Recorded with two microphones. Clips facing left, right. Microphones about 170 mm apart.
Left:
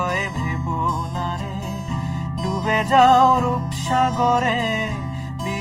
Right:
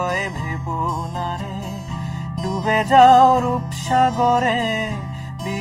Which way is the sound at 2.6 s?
45° right (ahead or behind).